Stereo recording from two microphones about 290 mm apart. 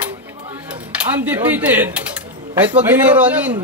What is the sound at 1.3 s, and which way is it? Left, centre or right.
Speech, centre.